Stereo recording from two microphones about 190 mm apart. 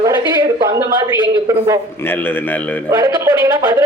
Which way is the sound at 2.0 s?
10° left (ahead or behind).